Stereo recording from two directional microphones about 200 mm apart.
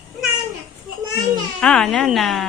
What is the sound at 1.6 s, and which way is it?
Speech, 5° left (ahead or behind).